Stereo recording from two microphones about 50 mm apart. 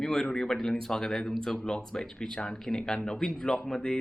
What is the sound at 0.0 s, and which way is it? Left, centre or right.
Speech, centre.